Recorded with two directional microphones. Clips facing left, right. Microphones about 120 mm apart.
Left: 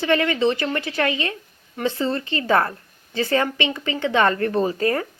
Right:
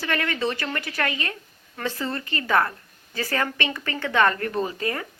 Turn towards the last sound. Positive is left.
turn(degrees=40)  # may be behind; listen again after turning